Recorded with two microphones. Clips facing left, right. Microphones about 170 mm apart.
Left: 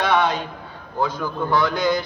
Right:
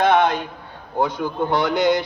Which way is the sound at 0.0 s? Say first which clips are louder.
Right 3 dB; 55° right (ahead or behind).